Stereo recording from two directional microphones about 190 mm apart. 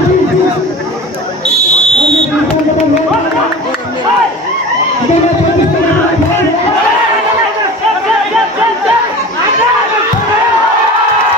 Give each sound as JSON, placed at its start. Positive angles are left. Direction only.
{"t": 1.5, "sound": "fire alarm", "side_deg": 35}